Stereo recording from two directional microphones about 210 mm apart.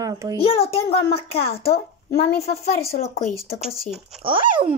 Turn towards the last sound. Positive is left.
turn(degrees=-25)  # may be behind; listen again after turning